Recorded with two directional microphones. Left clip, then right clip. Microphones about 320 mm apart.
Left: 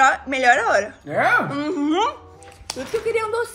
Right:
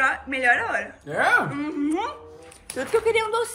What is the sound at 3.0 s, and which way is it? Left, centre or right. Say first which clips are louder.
Speech: left 3 dB; centre.